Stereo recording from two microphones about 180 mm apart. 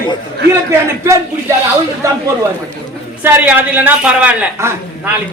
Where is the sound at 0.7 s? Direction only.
15° right (ahead or behind).